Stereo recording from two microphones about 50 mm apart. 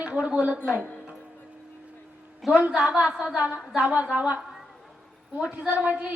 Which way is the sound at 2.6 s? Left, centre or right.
Right.